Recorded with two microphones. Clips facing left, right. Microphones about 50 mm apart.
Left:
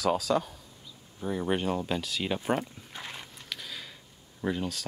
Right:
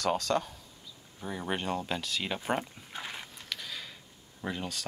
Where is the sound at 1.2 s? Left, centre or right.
Centre.